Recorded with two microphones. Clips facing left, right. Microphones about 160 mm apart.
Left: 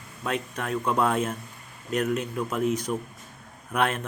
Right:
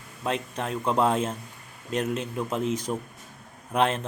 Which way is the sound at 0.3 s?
25° right (ahead or behind).